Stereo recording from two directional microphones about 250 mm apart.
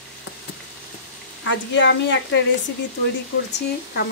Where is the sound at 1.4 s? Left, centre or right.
Left.